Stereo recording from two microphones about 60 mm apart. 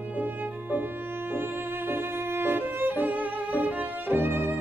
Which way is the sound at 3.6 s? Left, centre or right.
Right.